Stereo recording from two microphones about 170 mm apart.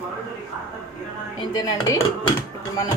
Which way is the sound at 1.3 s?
20° left (ahead or behind).